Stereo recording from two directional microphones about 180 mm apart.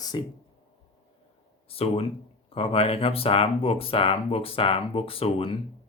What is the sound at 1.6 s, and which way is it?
Speech, 30° left (ahead or behind).